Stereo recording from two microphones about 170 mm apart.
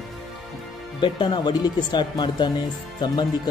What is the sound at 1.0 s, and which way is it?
Speech, 25° left (ahead or behind).